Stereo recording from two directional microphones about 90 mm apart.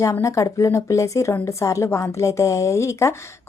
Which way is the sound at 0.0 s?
35° left (ahead or behind).